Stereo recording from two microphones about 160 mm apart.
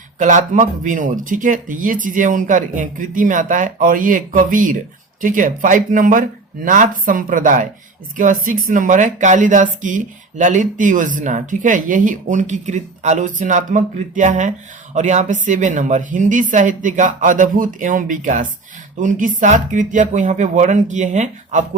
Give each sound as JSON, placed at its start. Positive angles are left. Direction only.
{"t": 0.2, "sound": "speech", "side_deg": -50}